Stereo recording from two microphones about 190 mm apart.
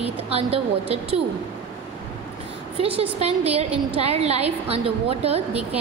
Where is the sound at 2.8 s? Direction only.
30° right (ahead or behind).